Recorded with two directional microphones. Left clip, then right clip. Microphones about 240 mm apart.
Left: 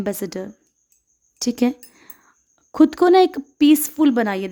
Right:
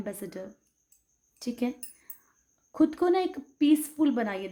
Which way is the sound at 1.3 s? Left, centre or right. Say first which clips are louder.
Left 12 dB; left.